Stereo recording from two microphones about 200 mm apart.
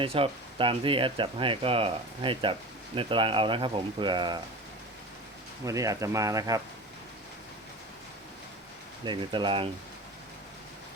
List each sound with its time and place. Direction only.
0.0 s speech: 25° right (ahead or behind)
5.6 s speech: 15° right (ahead or behind)
9.0 s speech: 25° right (ahead or behind)